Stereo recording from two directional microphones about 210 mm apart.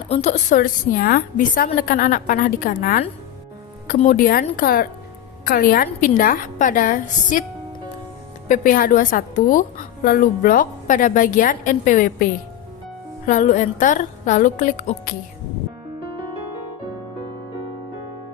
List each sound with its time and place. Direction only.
0.1 s a woman's voice: 35° left (ahead or behind)
8.4 s a woman's voice: 40° left (ahead or behind)